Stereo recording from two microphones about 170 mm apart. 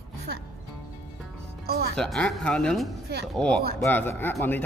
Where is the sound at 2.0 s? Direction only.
Centre (ahead or behind).